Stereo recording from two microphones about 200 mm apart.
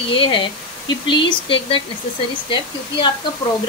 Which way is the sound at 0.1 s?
25° left (ahead or behind).